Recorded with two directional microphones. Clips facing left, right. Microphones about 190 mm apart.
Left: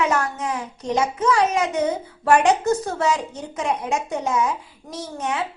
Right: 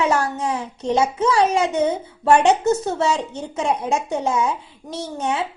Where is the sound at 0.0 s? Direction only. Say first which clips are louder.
Right 2 dB; 30° right (ahead or behind).